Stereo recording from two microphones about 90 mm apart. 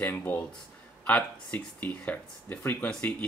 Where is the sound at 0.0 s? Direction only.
20° left (ahead or behind).